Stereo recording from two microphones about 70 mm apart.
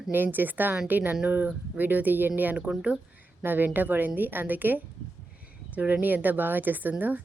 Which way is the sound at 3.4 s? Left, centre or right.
Right.